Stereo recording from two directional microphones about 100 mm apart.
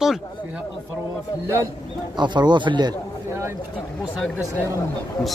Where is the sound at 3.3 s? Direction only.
25° right (ahead or behind).